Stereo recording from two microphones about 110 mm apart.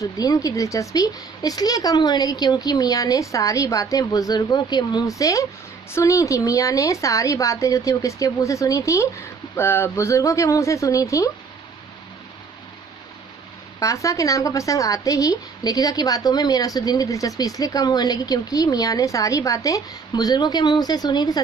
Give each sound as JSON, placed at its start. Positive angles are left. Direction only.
{"t": 0.0, "sound": "a woman's voice", "side_deg": 30}
{"t": 13.7, "sound": "speech", "side_deg": 30}